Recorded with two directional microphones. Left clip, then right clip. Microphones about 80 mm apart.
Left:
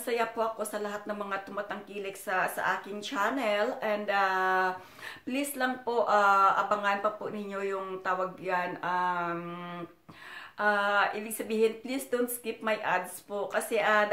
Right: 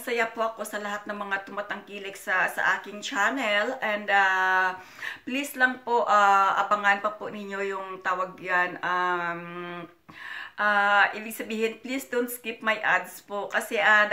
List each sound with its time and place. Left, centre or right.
0.0 s speech: left
10.6 s speech: left